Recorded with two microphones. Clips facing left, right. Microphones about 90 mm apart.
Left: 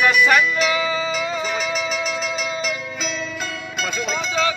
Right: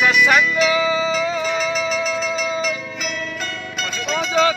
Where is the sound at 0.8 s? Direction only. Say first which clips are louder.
Right 4 dB; 20° right (ahead or behind).